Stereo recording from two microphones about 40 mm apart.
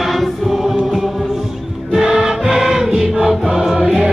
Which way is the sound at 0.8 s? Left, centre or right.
Centre.